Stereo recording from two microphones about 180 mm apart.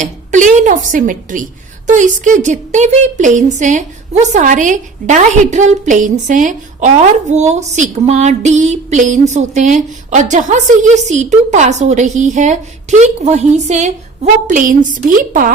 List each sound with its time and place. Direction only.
0.0 s a woman's voice: 45° right (ahead or behind)